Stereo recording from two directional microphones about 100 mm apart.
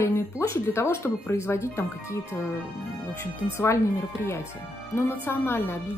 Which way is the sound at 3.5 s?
25° left (ahead or behind).